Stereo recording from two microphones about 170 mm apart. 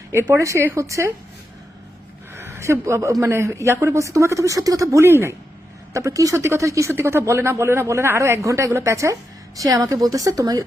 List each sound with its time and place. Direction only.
0.3 s speech: 15° right (ahead or behind)
2.3 s a woman's voice: 15° right (ahead or behind)